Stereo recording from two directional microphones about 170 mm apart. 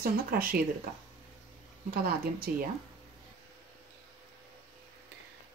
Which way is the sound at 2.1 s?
60° right (ahead or behind).